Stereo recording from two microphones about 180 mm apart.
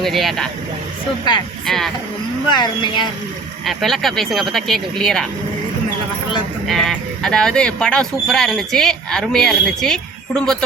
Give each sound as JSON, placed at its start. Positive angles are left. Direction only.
{"t": 0.0, "sound": "speech", "side_deg": 0}
{"t": 1.6, "sound": "speech", "side_deg": 0}
{"t": 2.5, "sound": "speech", "side_deg": 25}
{"t": 3.7, "sound": "speech", "side_deg": 0}
{"t": 6.7, "sound": "speech", "side_deg": 0}